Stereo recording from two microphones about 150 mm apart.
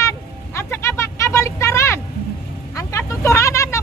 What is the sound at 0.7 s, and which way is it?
Vehicle, 20° left (ahead or behind).